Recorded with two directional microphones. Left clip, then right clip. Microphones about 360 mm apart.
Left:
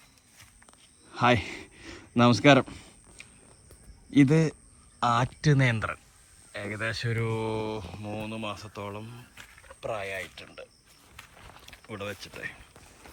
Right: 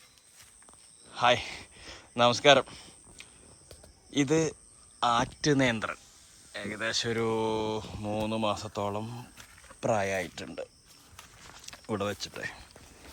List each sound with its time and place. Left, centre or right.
1.1 s a sound: centre
4.1 s speech: centre
9.9 s speech: right
10.3 s speech: centre